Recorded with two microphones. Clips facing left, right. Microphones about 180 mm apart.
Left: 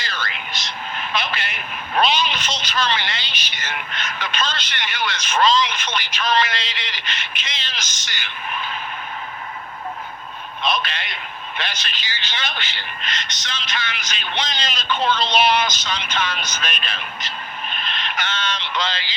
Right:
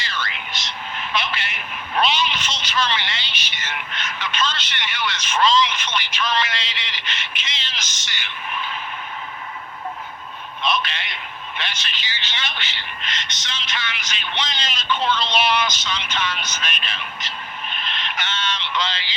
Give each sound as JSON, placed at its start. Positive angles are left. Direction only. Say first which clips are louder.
{"t": 0.0, "sound": "a sound", "louder": "even", "side_deg": 40}
{"t": 0.9, "sound": "a man's voice", "louder": "even", "side_deg": 45}
{"t": 10.6, "sound": "a man's voice", "louder": "even", "side_deg": 40}